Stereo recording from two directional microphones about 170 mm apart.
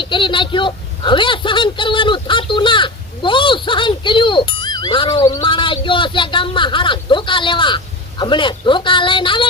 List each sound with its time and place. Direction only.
0.0 s speech: 30° left (ahead or behind)